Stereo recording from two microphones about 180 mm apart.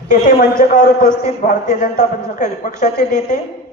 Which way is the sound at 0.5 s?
50° left (ahead or behind).